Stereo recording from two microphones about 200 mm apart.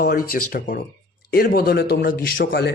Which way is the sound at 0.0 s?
50° left (ahead or behind).